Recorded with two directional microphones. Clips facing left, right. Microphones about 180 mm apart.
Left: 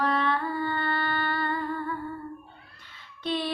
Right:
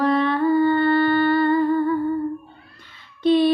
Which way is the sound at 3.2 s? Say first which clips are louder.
Right 14 dB; 15° right (ahead or behind).